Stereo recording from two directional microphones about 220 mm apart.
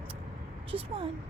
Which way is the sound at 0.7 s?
25° right (ahead or behind).